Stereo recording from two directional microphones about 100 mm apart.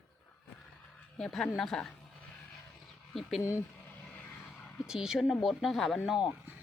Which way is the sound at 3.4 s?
30° left (ahead or behind).